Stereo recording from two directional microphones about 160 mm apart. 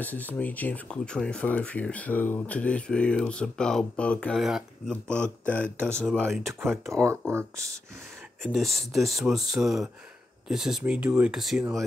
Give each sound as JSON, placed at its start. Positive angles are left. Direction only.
{"t": 0.0, "sound": "speech", "side_deg": 10}
{"t": 6.9, "sound": "speech", "side_deg": -20}
{"t": 8.5, "sound": "speech", "side_deg": 0}